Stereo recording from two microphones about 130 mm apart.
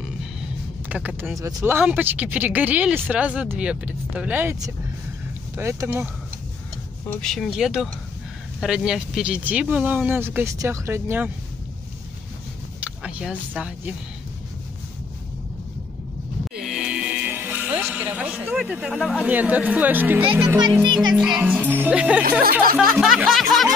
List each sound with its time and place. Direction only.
0.8 s speech: 10° right (ahead or behind)
5.6 s speech: 20° right (ahead or behind)
7.2 s music: 5° left (ahead or behind)
8.5 s speech: 5° right (ahead or behind)
12.8 s speech: 10° right (ahead or behind)
16.6 s music: 5° right (ahead or behind)
17.9 s speech: 10° right (ahead or behind)
20.8 s a child's voice: 35° right (ahead or behind)
21.1 s speech: 5° right (ahead or behind)
22.8 s music: 5° right (ahead or behind)